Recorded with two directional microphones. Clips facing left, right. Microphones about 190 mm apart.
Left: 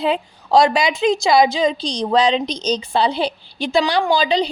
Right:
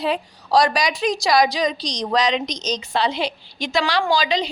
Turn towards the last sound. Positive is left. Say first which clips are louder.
# left 3 dB
turn(degrees=30)  # may be behind; listen again after turning